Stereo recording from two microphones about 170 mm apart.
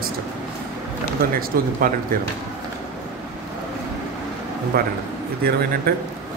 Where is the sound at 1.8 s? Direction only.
55° right (ahead or behind).